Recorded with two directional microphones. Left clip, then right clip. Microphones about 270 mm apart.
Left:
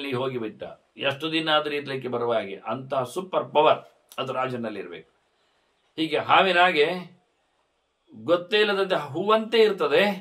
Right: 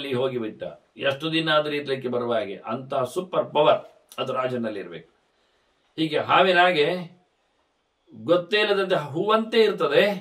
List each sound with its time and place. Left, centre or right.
0.0 s speech: centre
8.3 s speech: centre